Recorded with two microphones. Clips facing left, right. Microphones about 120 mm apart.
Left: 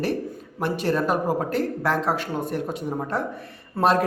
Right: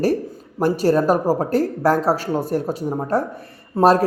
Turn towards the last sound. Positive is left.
turn(degrees=-40)  # may be behind; listen again after turning